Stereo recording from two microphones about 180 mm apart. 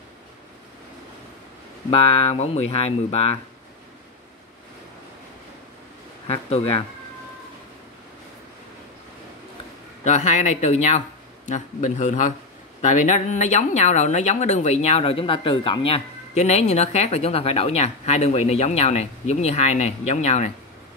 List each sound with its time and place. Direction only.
1.9 s speech: 35° left (ahead or behind)
6.2 s speech: 35° left (ahead or behind)
10.0 s a man's voice: 40° left (ahead or behind)